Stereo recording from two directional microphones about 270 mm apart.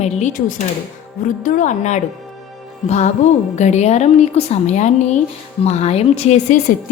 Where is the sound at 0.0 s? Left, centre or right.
Left.